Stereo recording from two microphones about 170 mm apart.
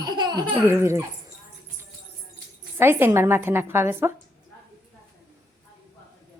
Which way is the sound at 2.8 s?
15° right (ahead or behind).